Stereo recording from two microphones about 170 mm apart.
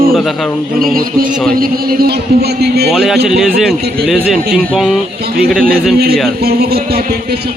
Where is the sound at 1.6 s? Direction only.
60° right (ahead or behind).